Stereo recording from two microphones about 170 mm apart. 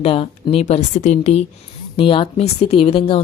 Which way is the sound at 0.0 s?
35° left (ahead or behind).